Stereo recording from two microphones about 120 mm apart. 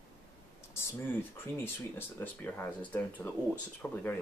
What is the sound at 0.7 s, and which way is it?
Speech, 20° left (ahead or behind).